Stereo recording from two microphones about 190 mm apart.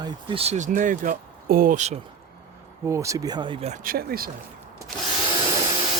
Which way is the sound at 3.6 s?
45° right (ahead or behind).